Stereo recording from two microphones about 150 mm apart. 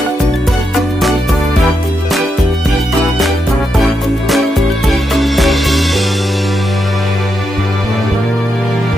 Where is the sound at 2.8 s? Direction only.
Centre (ahead or behind).